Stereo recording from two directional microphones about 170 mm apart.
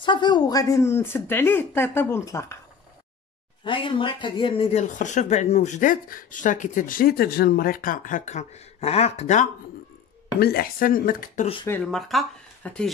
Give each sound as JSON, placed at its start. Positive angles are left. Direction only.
{"t": 0.0, "sound": "speech", "side_deg": 25}
{"t": 3.6, "sound": "speech", "side_deg": 30}
{"t": 10.4, "sound": "speech", "side_deg": 60}
{"t": 11.6, "sound": "speech", "side_deg": 10}